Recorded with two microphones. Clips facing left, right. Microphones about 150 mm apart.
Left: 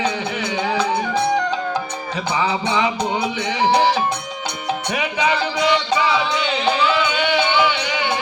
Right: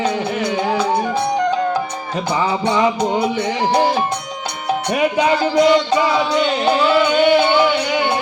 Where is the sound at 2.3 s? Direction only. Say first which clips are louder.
Right 2 dB; 45° right (ahead or behind).